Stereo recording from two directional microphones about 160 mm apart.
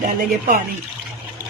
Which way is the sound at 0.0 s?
60° right (ahead or behind).